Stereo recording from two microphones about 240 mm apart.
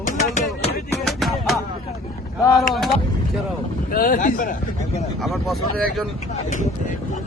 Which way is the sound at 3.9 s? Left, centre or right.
Left.